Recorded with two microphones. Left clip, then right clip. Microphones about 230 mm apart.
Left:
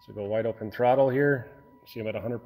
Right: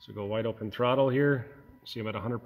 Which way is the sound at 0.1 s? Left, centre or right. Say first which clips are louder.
Left 4 dB; centre.